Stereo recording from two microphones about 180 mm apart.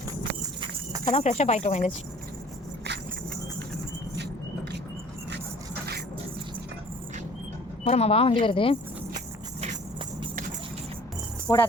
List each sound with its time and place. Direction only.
1.0 s speech: 35° left (ahead or behind)
7.9 s speech: 35° left (ahead or behind)
11.4 s speech: 15° left (ahead or behind)